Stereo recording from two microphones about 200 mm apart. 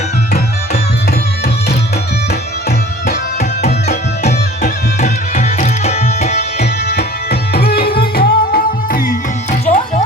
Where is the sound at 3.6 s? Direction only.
35° left (ahead or behind).